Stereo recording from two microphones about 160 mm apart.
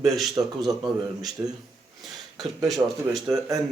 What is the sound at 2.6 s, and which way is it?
Speech, centre (ahead or behind).